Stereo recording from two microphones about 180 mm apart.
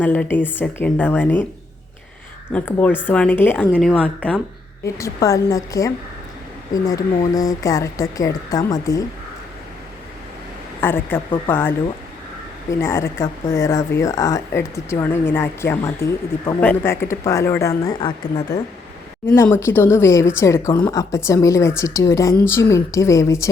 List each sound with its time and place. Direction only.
0.0 s speech: 10° left (ahead or behind)
2.5 s speech: 10° left (ahead or behind)
10.8 s speech: 10° left (ahead or behind)
12.8 s speech: 15° left (ahead or behind)